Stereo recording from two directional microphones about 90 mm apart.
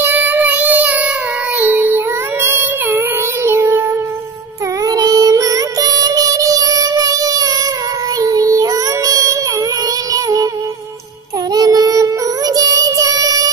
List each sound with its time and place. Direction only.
0.0 s child singing: 20° right (ahead or behind)
3.4 s music: 25° right (ahead or behind)
4.8 s music: 40° right (ahead or behind)
8.2 s child singing: 40° right (ahead or behind)
10.1 s music: 40° right (ahead or behind)
11.5 s child singing: 45° right (ahead or behind)